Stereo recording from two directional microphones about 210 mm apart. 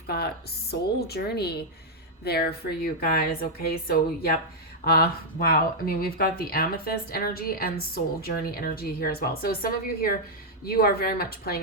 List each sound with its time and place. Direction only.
0.7 s speech: 50° left (ahead or behind)